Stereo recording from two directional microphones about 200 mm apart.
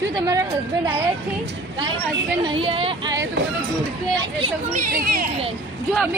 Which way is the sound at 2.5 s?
25° right (ahead or behind).